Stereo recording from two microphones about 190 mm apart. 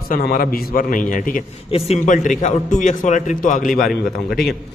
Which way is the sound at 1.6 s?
30° left (ahead or behind).